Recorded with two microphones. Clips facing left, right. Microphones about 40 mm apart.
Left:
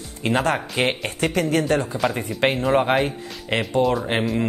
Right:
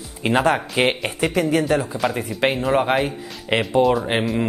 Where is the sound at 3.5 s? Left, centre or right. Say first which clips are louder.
Right 3 dB; centre.